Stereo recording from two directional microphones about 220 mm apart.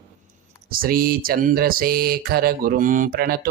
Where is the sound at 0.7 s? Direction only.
40° right (ahead or behind).